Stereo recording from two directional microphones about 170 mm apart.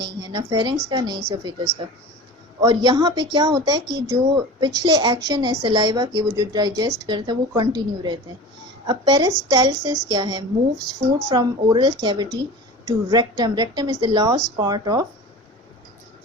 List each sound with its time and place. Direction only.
0.0 s a woman's voice: 25° right (ahead or behind)
2.6 s a woman's voice: 25° right (ahead or behind)